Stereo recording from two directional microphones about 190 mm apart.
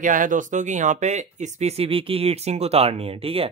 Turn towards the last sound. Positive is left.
turn(degrees=-30)  # may be behind; listen again after turning